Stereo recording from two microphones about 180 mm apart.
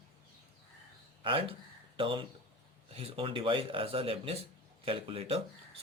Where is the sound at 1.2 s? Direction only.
30° right (ahead or behind).